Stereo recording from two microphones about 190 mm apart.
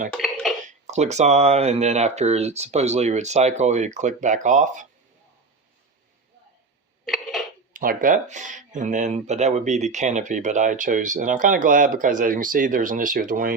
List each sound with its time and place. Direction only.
0.1 s dishes: centre (ahead or behind)
0.7 s speech: 35° right (ahead or behind)
7.0 s a sound: centre (ahead or behind)
7.7 s speech: 45° right (ahead or behind)